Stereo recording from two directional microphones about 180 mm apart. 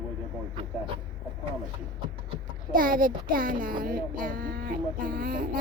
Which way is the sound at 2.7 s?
50° right (ahead or behind).